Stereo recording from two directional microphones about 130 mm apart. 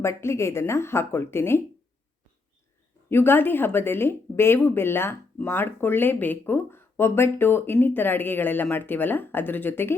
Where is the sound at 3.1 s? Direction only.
15° left (ahead or behind).